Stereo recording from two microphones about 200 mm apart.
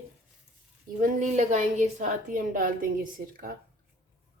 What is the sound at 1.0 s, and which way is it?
A woman's voice, 40° right (ahead or behind).